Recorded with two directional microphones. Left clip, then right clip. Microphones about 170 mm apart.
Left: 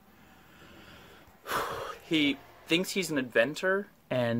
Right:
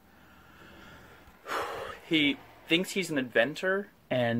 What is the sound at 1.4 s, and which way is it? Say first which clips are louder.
Speech: left 1 dB; 10° left (ahead or behind).